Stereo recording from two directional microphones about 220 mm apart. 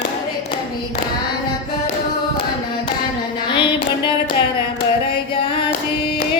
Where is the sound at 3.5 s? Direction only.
20° left (ahead or behind).